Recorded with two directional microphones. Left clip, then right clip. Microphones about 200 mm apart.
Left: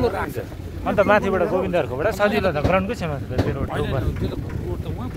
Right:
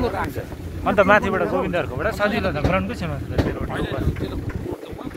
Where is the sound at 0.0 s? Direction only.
60° left (ahead or behind).